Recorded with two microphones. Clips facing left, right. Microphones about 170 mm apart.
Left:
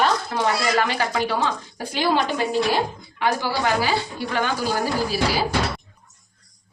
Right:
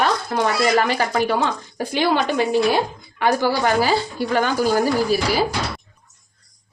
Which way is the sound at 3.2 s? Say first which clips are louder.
Right 4 dB; 45° right (ahead or behind).